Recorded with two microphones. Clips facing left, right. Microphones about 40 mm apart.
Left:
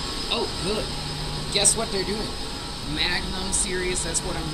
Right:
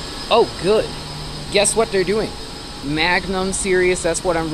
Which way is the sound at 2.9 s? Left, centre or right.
Right.